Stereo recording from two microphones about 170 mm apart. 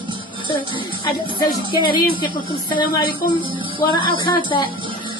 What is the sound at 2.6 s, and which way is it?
A woman's voice, 25° left (ahead or behind).